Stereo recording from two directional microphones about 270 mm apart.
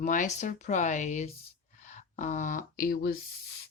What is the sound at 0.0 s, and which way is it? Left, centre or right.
Speech, left.